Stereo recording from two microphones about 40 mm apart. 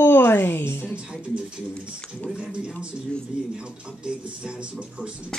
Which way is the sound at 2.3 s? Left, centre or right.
Centre.